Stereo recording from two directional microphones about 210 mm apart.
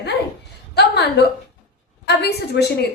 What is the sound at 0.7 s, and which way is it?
A woman's voice, 50° left (ahead or behind).